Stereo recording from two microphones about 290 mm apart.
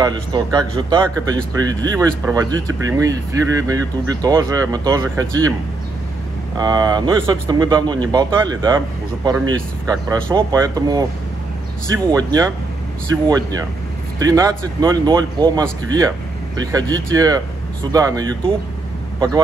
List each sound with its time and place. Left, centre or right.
0.0 s speech: centre
6.5 s speech: centre
14.2 s speech: centre
16.7 s speech: centre